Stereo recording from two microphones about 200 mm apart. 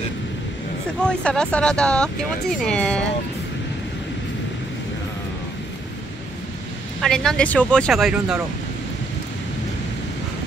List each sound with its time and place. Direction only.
1.0 s speech: 5° left (ahead or behind)
7.0 s speech: centre (ahead or behind)